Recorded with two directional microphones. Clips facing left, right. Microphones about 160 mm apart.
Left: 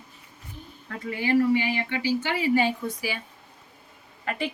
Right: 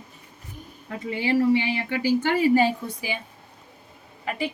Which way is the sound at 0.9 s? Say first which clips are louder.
Even; 25° right (ahead or behind).